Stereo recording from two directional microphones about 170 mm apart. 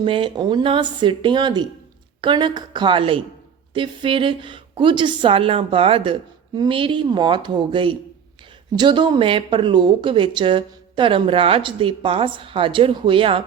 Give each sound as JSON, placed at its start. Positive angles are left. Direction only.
{"t": 0.0, "sound": "a woman's voice", "side_deg": -30}